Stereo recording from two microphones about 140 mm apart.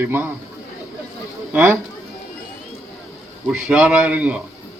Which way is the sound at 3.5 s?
10° right (ahead or behind).